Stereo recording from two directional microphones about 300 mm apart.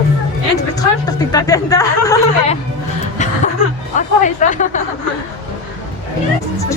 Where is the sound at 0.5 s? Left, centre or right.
Centre.